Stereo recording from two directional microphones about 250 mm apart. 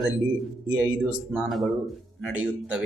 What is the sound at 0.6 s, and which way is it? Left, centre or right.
Speech, centre.